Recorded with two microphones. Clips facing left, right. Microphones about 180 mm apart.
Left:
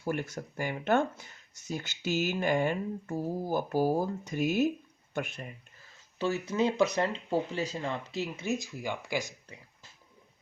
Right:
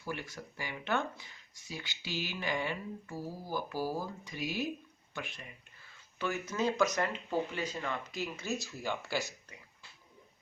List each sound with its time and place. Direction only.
0.0 s speech: 50° left (ahead or behind)
6.5 s speech: 25° left (ahead or behind)